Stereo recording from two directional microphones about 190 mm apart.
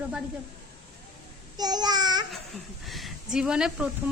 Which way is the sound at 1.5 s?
20° right (ahead or behind).